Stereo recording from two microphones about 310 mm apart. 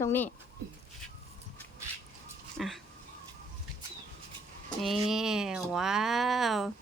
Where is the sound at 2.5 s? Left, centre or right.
Centre.